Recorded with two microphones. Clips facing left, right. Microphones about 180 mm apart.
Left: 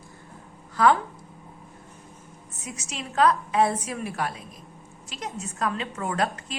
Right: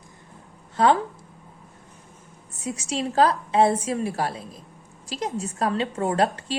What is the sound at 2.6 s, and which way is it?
A woman's voice, 30° right (ahead or behind).